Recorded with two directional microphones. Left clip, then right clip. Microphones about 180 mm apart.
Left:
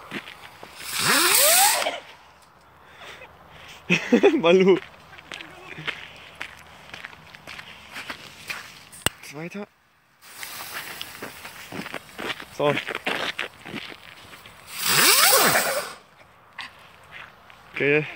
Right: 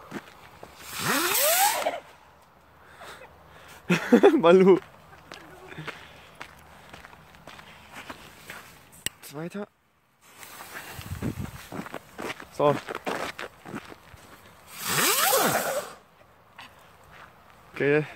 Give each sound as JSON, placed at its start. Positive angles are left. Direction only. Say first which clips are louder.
{"t": 0.7, "sound": "zipper", "louder": "left 6 dB", "side_deg": 5}
{"t": 1.5, "sound": "zipper", "louder": "left 4 dB", "side_deg": 25}
{"t": 3.7, "sound": "speech", "louder": "left 1 dB", "side_deg": -20}
{"t": 5.3, "sound": "run", "louder": "left 5 dB", "side_deg": -10}
{"t": 5.9, "sound": "walk", "louder": "left 11 dB", "side_deg": 0}
{"t": 9.3, "sound": "a sound", "louder": "left 1 dB", "side_deg": -5}
{"t": 11.9, "sound": "walk", "louder": "left 6 dB", "side_deg": 0}
{"t": 12.6, "sound": "a sound", "louder": "left 1 dB", "side_deg": 5}
{"t": 13.7, "sound": "a sound", "louder": "left 5 dB", "side_deg": 5}
{"t": 17.7, "sound": "speech", "louder": "left 2 dB", "side_deg": -10}